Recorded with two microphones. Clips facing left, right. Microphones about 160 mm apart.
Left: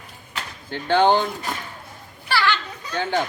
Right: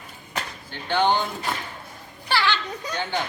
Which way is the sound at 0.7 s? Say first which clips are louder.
Left 5 dB; 55° left (ahead or behind).